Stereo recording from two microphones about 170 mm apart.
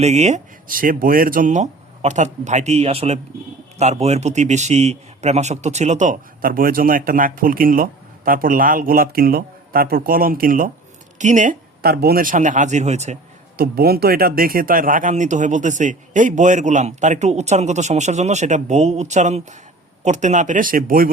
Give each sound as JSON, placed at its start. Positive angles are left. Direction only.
{"t": 0.0, "sound": "a man's voice", "side_deg": -40}
{"t": 13.6, "sound": "a man's voice", "side_deg": -65}